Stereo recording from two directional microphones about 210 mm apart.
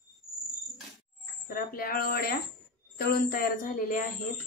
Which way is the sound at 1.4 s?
45° left (ahead or behind).